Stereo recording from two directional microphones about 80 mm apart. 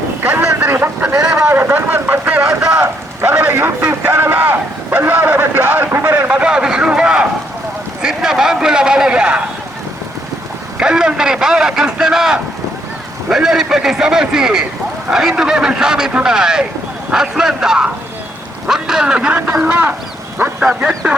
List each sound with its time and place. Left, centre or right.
0.2 s speech: right
1.1 s speech: centre
1.5 s speech: right
2.4 s speech: centre
2.8 s a sound: right
3.3 s speech: right
4.0 s vehicle: right
8.0 s a man's voice: centre
10.8 s a man's voice: centre